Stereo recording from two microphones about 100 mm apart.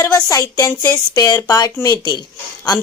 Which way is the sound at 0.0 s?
30° left (ahead or behind).